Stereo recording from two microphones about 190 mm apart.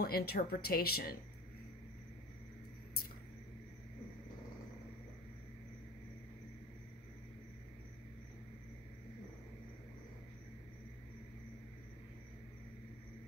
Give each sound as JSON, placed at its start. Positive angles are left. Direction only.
{"t": 0.0, "sound": "speech", "side_deg": 55}